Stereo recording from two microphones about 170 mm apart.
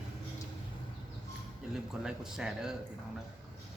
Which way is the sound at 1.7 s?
5° right (ahead or behind).